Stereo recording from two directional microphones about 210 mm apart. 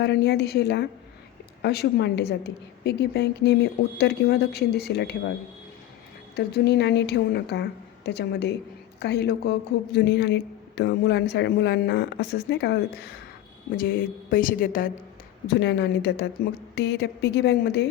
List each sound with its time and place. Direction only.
0.0 s a woman's voice: 55° left (ahead or behind)
6.3 s a woman's voice: 50° left (ahead or behind)
13.7 s a woman's voice: 45° left (ahead or behind)